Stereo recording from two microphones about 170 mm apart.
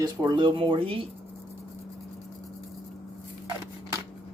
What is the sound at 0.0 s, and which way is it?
Speech, 25° right (ahead or behind).